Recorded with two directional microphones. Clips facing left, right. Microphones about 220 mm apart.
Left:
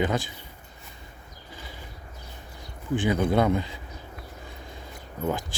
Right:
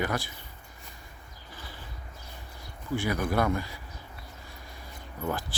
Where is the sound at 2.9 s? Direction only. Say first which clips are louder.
Left 5 dB; 20° left (ahead or behind).